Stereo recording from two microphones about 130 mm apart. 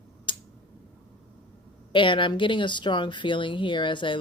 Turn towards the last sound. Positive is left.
turn(degrees=40)  # may be behind; listen again after turning